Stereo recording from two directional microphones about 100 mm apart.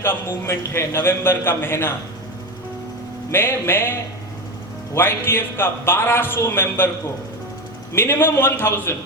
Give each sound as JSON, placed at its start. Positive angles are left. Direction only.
{"t": 0.0, "sound": "a man's voice", "side_deg": 25}
{"t": 3.3, "sound": "a man's voice", "side_deg": 25}
{"t": 4.9, "sound": "a man's voice", "side_deg": 25}
{"t": 7.9, "sound": "a man's voice", "side_deg": 25}